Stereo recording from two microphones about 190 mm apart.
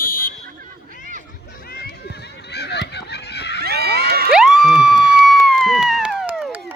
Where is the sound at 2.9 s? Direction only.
60° left (ahead or behind).